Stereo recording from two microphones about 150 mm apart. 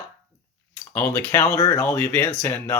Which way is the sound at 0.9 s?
15° left (ahead or behind).